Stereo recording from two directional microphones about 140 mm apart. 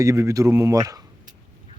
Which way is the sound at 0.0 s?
20° right (ahead or behind).